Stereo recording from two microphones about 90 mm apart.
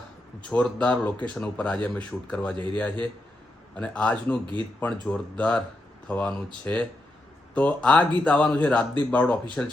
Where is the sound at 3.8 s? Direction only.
15° left (ahead or behind).